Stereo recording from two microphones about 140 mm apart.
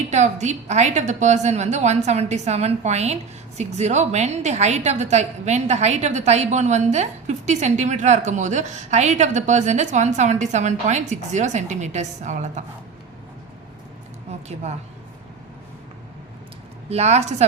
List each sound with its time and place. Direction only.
0.1 s a woman's voice: 55° right (ahead or behind)
14.3 s a woman's voice: 50° right (ahead or behind)
16.9 s a woman's voice: 50° right (ahead or behind)